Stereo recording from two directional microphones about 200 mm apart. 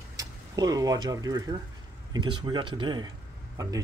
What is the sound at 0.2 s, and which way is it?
Speech, 20° right (ahead or behind).